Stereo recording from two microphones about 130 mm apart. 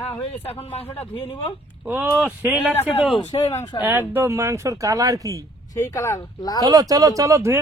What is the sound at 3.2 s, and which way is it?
Speech, 45° left (ahead or behind).